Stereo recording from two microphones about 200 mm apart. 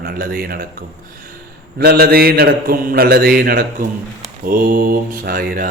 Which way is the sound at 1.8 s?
50° right (ahead or behind).